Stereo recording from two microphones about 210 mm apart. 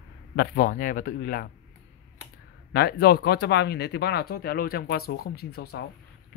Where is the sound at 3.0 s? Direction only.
50° left (ahead or behind).